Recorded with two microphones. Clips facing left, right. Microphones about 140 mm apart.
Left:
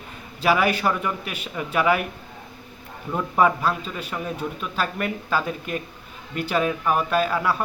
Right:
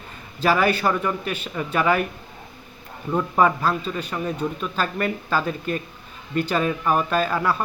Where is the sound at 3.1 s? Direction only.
5° left (ahead or behind).